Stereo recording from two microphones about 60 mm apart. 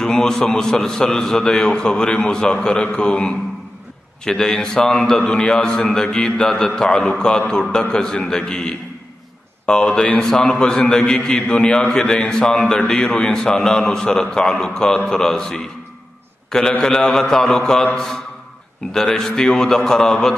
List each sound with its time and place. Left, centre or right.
0.0 s a man's voice: centre
10.2 s a man's voice: centre